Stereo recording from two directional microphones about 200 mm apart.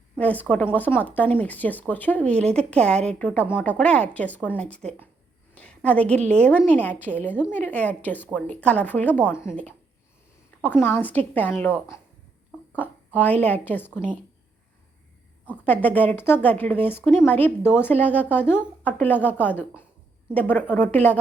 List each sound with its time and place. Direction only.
0.2 s speech: 5° left (ahead or behind)
15.6 s speech: 10° left (ahead or behind)